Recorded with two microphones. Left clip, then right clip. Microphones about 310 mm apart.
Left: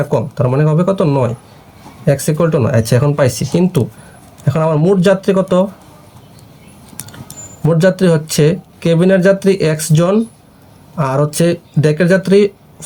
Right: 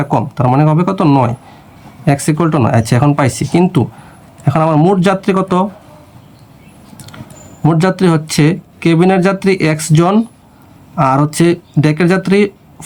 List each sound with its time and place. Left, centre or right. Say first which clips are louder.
0.1 s speech: right 2 dB; centre
7.6 s speech: left 1 dB; centre